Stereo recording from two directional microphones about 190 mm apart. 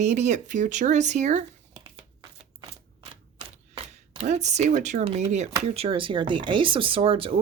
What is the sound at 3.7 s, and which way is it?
Speech, 30° right (ahead or behind).